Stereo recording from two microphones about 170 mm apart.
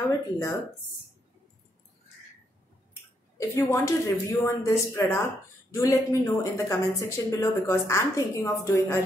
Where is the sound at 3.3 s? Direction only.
15° left (ahead or behind).